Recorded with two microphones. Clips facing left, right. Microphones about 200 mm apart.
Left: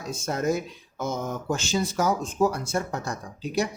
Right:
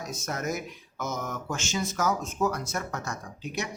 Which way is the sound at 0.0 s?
30° left (ahead or behind).